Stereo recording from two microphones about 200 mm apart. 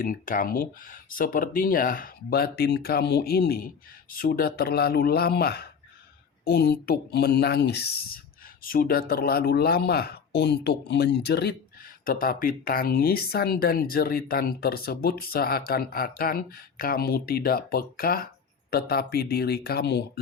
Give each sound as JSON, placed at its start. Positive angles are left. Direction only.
{"t": 0.0, "sound": "speech", "side_deg": 45}